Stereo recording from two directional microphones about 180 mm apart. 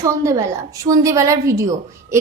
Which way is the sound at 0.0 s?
15° right (ahead or behind).